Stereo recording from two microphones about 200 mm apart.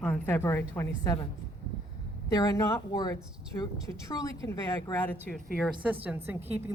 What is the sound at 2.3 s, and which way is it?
A woman's voice, 15° left (ahead or behind).